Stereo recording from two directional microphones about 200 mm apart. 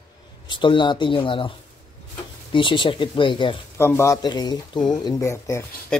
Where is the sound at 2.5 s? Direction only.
25° left (ahead or behind).